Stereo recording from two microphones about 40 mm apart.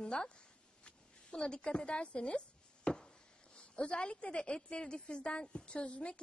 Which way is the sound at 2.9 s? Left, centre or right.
Left.